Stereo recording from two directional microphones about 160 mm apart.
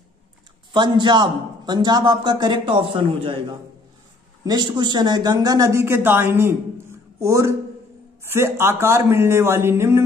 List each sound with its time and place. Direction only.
0.7 s speech: 30° right (ahead or behind)